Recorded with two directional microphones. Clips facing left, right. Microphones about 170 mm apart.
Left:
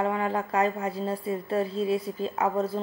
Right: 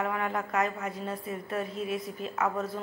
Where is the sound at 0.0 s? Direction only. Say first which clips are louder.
Left 4 dB; 30° left (ahead or behind).